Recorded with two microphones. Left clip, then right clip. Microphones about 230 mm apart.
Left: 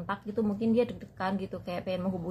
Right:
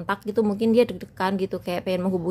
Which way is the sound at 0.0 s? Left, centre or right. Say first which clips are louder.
Right 9 dB; right.